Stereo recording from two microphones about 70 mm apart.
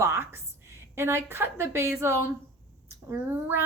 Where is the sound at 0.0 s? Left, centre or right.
Right.